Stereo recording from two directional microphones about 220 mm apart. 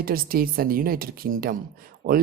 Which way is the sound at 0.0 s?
40° right (ahead or behind).